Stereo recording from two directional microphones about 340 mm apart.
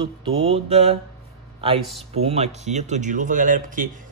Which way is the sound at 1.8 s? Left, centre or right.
Centre.